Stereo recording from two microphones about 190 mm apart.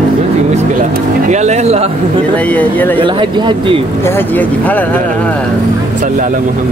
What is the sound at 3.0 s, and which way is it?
Speech, 25° right (ahead or behind).